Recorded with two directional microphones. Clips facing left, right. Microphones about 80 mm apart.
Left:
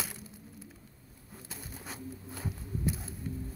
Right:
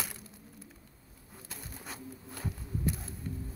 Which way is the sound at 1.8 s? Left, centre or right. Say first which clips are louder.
Left 3 dB; centre.